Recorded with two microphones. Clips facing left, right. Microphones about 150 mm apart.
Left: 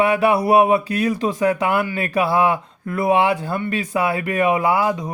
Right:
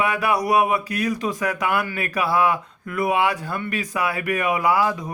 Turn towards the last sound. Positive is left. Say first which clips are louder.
# left 2 dB
turn(degrees=25)  # may be behind; listen again after turning